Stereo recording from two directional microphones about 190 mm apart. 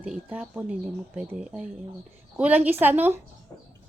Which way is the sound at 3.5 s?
15° left (ahead or behind).